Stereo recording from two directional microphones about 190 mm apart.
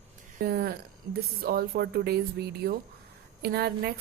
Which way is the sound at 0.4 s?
55° right (ahead or behind).